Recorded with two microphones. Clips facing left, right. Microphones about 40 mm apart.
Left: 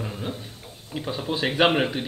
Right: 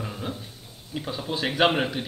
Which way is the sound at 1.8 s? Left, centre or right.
Left.